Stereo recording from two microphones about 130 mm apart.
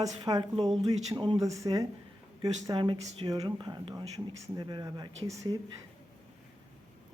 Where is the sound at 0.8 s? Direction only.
30° right (ahead or behind).